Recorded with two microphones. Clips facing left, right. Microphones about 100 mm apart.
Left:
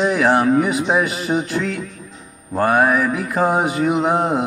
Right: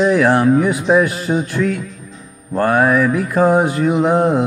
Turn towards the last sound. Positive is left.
turn(degrees=15)  # may be behind; listen again after turning